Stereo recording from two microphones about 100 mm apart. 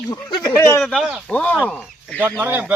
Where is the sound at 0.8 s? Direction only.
5° left (ahead or behind).